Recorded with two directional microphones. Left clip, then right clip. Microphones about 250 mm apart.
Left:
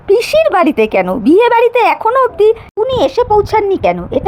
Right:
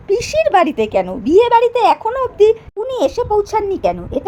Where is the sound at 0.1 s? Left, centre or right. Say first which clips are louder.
Left 4 dB; centre.